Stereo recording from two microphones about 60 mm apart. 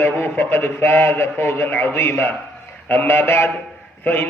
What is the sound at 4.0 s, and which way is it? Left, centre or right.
Speech, left.